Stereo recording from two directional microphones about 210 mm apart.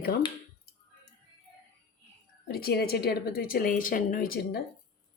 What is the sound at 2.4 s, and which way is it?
A woman's voice, 50° left (ahead or behind).